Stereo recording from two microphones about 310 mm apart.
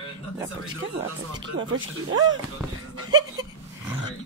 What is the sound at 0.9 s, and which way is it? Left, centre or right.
Speech, centre.